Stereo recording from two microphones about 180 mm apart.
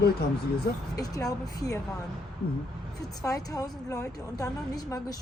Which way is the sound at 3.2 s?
20° left (ahead or behind).